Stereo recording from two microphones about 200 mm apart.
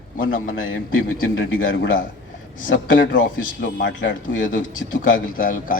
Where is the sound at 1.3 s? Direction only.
70° left (ahead or behind).